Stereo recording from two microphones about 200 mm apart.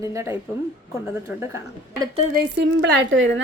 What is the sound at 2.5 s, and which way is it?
Speech, 60° right (ahead or behind).